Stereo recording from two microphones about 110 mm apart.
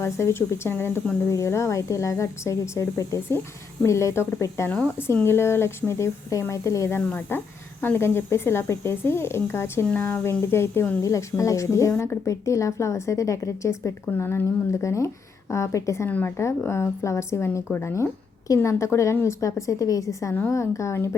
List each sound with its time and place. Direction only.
0.0 s a woman's voice: 25° left (ahead or behind)